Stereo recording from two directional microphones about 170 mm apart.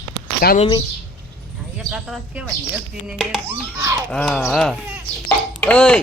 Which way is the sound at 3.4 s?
15° right (ahead or behind).